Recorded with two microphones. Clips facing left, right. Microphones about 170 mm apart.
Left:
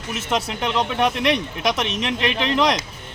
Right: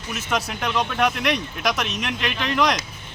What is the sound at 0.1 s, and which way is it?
Speech, 25° left (ahead or behind).